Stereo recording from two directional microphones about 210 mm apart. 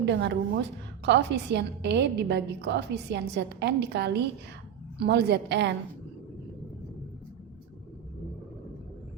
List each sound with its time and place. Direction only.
0.0 s a woman's voice: 55° right (ahead or behind)